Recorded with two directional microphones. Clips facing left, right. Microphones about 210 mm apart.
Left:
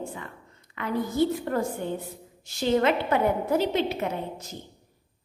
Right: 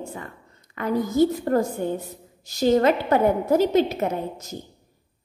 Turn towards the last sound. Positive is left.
turn(degrees=-45)  # may be behind; listen again after turning